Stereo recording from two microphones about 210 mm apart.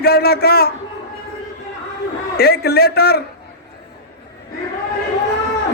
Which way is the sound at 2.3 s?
50° left (ahead or behind).